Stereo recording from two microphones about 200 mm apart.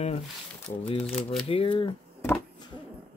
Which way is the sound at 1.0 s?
Centre (ahead or behind).